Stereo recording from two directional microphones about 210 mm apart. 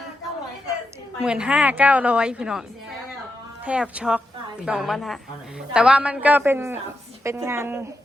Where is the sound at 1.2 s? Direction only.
5° right (ahead or behind).